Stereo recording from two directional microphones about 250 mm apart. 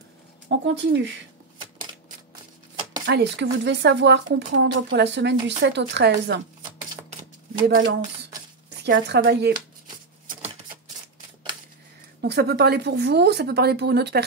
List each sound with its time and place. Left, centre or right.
0.5 s a woman's voice: right
2.7 s a sound: centre
3.1 s a woman's voice: right
6.6 s shuffling cards: centre
8.6 s speech: right
10.2 s typewriter: right
12.2 s a woman's voice: right